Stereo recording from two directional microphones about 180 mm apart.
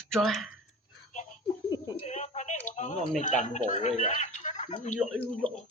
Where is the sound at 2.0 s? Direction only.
40° left (ahead or behind).